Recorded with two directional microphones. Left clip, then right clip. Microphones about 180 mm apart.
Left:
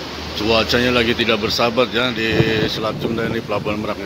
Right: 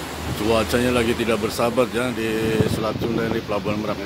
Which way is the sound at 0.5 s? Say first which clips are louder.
Left 4 dB; centre (ahead or behind).